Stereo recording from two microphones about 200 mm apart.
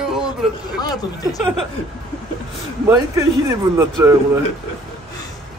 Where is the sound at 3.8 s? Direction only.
10° right (ahead or behind).